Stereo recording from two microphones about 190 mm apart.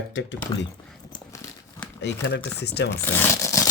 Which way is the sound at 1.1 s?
15° left (ahead or behind).